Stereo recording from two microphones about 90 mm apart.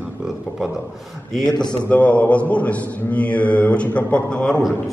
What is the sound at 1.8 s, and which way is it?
Mantra, 15° left (ahead or behind).